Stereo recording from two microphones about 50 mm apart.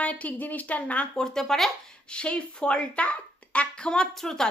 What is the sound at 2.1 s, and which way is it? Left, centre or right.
Speech, left.